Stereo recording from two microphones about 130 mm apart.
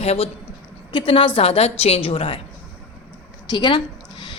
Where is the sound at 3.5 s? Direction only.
35° left (ahead or behind).